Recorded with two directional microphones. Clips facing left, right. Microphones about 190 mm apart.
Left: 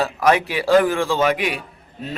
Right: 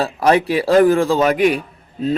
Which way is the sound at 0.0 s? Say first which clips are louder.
Right 3 dB; 30° right (ahead or behind).